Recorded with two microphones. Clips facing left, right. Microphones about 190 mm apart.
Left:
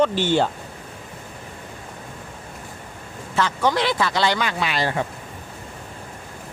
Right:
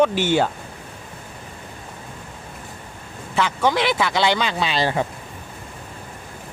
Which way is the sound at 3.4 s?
15° right (ahead or behind).